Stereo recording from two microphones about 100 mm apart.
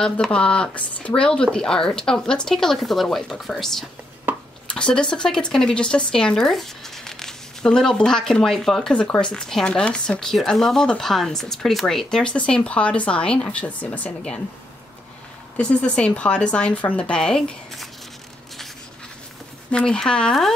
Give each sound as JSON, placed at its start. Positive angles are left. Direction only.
{"t": 0.0, "sound": "speech", "side_deg": 10}
{"t": 4.3, "sound": "a sound", "side_deg": -15}
{"t": 4.6, "sound": "speech", "side_deg": 10}
{"t": 15.5, "sound": "speech", "side_deg": 10}
{"t": 19.7, "sound": "speech", "side_deg": 10}